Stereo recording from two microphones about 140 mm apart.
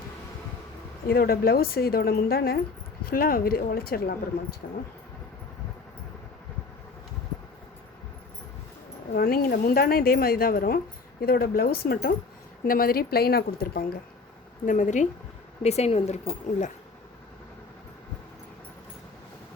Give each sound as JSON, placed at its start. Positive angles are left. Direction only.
{"t": 1.0, "sound": "a woman's voice", "side_deg": 90}
{"t": 9.1, "sound": "a woman's voice", "side_deg": 90}
{"t": 14.7, "sound": "speech", "side_deg": 65}
{"t": 15.6, "sound": "speech", "side_deg": 50}